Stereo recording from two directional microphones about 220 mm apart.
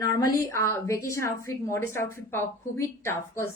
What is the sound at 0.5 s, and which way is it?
A woman's voice, 10° left (ahead or behind).